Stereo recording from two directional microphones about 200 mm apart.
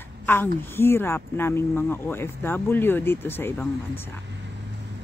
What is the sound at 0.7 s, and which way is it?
Speech, 10° left (ahead or behind).